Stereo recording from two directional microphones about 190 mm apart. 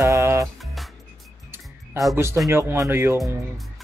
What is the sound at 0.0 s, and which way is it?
Music, 15° right (ahead or behind).